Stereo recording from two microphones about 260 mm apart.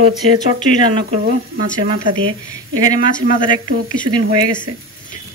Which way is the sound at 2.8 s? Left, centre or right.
Left.